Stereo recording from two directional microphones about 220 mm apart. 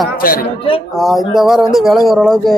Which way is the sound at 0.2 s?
40° left (ahead or behind).